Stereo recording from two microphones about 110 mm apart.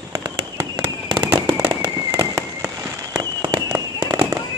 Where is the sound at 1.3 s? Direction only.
30° right (ahead or behind).